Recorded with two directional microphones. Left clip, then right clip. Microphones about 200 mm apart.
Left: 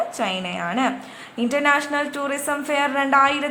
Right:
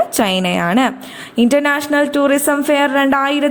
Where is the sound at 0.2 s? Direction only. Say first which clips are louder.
Right 9 dB; 45° right (ahead or behind).